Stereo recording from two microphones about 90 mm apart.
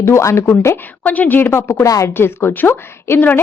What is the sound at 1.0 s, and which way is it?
A woman's voice, 20° left (ahead or behind).